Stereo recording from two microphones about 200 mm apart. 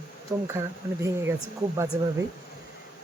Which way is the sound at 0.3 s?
10° right (ahead or behind).